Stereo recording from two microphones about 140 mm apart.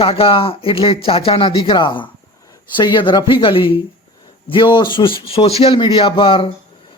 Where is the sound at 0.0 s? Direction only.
45° left (ahead or behind).